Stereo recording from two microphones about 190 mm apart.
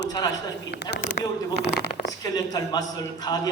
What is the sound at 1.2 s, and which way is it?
Speech, 50° left (ahead or behind).